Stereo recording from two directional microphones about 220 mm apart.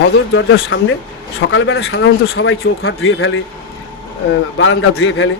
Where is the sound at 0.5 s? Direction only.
55° left (ahead or behind).